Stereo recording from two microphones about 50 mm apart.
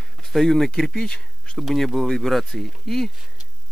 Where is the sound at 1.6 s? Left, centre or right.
Centre.